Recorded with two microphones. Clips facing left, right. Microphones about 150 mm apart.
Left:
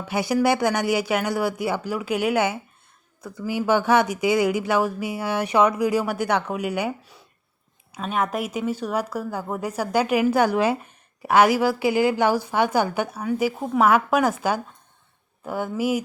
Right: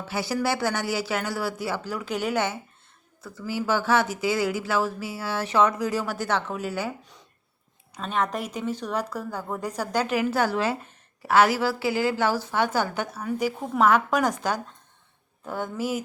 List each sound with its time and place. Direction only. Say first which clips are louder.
0.1 s speech: left 6 dB; 15° left (ahead or behind)